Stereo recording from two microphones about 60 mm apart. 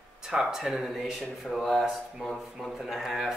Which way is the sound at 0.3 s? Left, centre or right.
Centre.